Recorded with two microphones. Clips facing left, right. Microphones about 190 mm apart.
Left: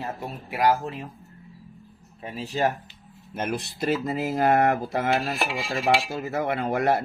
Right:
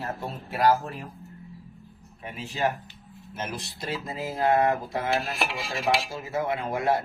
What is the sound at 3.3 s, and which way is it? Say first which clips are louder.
Speech: left 6 dB; 55° left (ahead or behind).